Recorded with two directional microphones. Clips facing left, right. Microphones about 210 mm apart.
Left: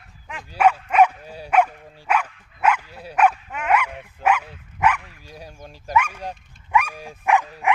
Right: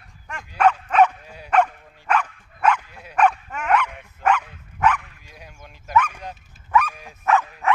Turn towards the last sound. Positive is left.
turn(degrees=15)  # may be behind; listen again after turning